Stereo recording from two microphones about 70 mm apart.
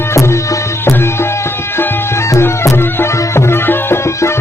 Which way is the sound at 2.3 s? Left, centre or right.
Left.